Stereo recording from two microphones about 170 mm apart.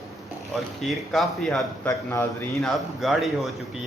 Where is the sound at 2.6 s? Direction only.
Centre (ahead or behind).